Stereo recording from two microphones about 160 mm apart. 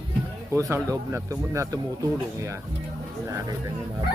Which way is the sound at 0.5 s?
20° right (ahead or behind).